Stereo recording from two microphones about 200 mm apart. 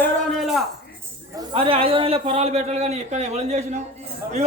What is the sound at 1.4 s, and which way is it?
Speech, 25° right (ahead or behind).